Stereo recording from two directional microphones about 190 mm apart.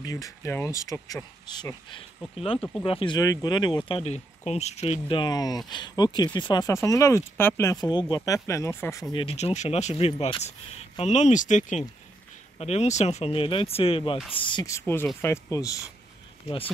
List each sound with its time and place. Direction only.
0.0 s speech: 20° left (ahead or behind)
9.1 s speech: 30° left (ahead or behind)